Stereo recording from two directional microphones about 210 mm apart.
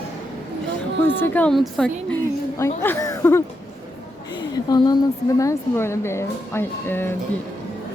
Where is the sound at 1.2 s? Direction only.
10° left (ahead or behind).